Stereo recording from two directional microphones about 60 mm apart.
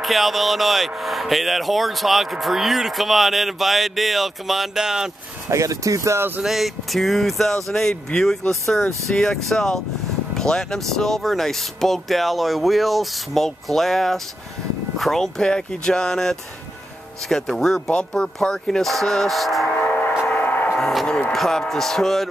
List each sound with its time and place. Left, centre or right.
0.0 s speech: centre
5.5 s speech: right
6.4 s speech: centre
20.2 s a sound: left
21.3 s speech: centre